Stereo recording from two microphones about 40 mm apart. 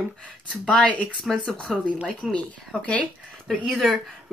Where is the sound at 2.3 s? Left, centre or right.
Left.